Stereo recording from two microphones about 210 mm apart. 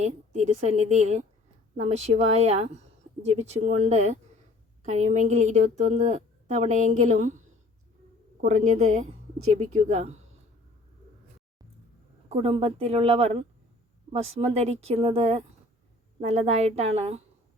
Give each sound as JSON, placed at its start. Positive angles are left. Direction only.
{"t": 0.0, "sound": "a woman's voice", "side_deg": -30}
{"t": 12.3, "sound": "a woman's voice", "side_deg": -30}